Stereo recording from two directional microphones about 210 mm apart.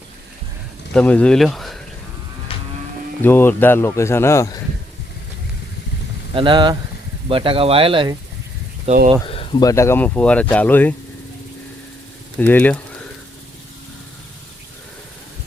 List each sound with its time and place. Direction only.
0.9 s speech: 5° left (ahead or behind)
2.5 s vehicle: 25° left (ahead or behind)
3.2 s speech: 10° left (ahead or behind)
6.3 s speech: 20° right (ahead or behind)
9.2 s speech: 25° left (ahead or behind); by 10.9 s 10° left (ahead or behind)
12.4 s speech: 10° left (ahead or behind)